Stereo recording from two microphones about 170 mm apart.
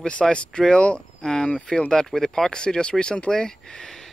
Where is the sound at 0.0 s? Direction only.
5° left (ahead or behind).